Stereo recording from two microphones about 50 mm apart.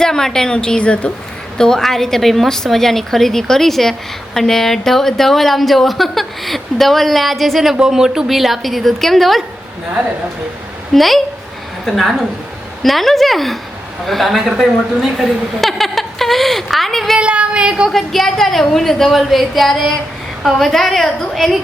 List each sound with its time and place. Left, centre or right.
0.0 s a woman's voice: centre
1.5 s a woman's voice: centre
7.8 s a woman's voice: centre
10.9 s a woman's voice: centre
17.2 s child singing: right
17.9 s a woman's voice: centre